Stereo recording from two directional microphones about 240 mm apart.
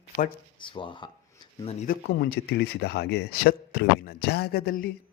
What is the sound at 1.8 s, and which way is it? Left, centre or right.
A man's voice, left.